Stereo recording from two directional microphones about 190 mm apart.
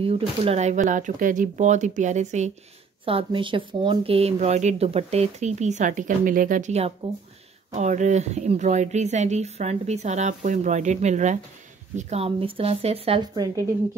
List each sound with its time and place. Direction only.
0.4 s speech: 35° right (ahead or behind)
3.1 s speech: 30° right (ahead or behind)